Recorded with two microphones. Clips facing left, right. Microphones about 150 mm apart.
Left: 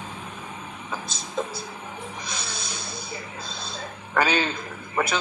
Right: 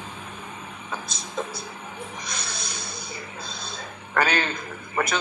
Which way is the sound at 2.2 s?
10° left (ahead or behind).